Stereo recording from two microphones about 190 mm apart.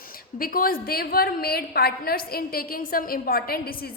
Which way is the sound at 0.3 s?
50° left (ahead or behind).